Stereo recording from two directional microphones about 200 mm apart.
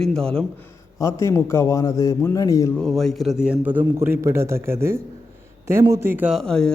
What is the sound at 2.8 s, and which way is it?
A man's voice, centre (ahead or behind).